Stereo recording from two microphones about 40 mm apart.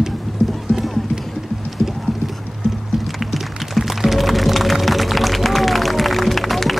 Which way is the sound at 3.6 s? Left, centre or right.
Centre.